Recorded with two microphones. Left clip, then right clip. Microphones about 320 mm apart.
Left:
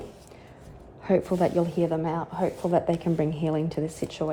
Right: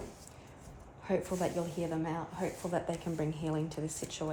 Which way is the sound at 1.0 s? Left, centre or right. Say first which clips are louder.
Left 10 dB; left.